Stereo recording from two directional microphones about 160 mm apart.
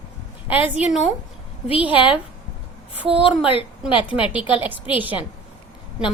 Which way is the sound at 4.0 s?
35° left (ahead or behind).